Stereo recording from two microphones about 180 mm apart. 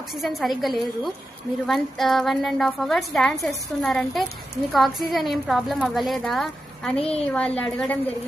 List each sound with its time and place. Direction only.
0.1 s a woman's voice: centre (ahead or behind)
7.0 s a woman's voice: 35° left (ahead or behind)
7.3 s a woman's voice: 5° left (ahead or behind)